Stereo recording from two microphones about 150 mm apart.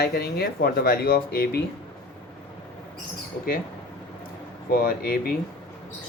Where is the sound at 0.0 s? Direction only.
90° left.